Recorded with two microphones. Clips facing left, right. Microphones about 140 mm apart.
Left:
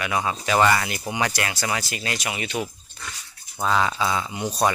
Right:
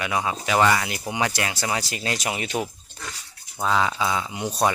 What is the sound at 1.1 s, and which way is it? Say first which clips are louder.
Speech: even; 20° right (ahead or behind).